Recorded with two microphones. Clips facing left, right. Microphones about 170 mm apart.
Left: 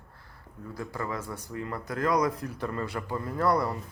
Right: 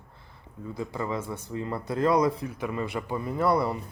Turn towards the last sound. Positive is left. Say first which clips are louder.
# right 2 dB
turn(degrees=-10)  # may be behind; listen again after turning